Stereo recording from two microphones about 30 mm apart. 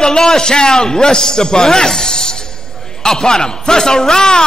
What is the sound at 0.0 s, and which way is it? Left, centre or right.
A man's voice, centre.